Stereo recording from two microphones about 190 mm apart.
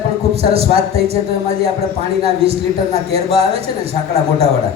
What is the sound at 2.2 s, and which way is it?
A man's voice, 30° right (ahead or behind).